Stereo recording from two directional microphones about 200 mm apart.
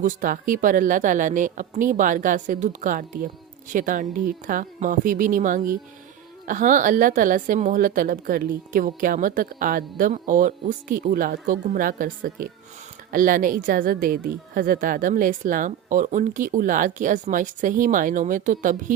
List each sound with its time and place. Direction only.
0.0 s a woman's voice: 40° right (ahead or behind)